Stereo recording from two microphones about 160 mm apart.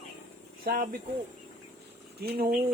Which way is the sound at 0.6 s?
65° right (ahead or behind).